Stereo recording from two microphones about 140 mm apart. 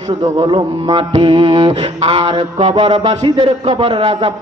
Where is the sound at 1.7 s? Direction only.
40° right (ahead or behind).